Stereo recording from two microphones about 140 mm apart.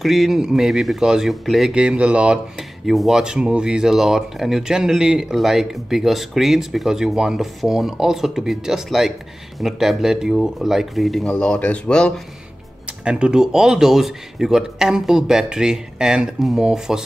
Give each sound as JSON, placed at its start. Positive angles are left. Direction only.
{"t": 0.0, "sound": "speech", "side_deg": 0}
{"t": 13.0, "sound": "speech", "side_deg": -5}